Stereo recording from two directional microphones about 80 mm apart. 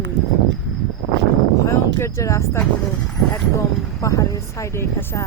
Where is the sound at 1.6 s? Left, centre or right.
Left.